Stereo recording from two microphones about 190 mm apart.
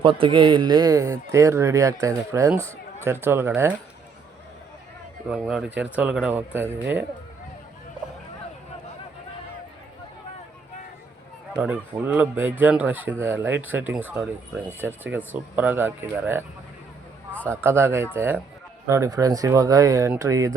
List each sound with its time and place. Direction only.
0.0 s speech: 25° right (ahead or behind); by 3.7 s 10° right (ahead or behind)
5.3 s speech: 5° right (ahead or behind)
11.5 s speech: 10° right (ahead or behind)
17.3 s a man's voice: 10° left (ahead or behind)
17.6 s speech: 10° right (ahead or behind)